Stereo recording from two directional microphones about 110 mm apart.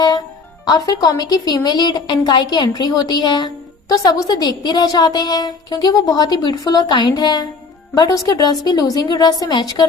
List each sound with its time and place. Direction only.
0.7 s a woman's voice: 35° left (ahead or behind)